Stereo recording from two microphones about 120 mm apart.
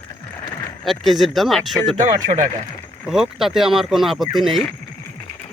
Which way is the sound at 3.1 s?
5° right (ahead or behind).